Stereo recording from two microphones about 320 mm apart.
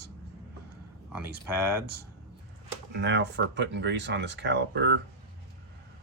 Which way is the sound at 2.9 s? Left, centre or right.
Right.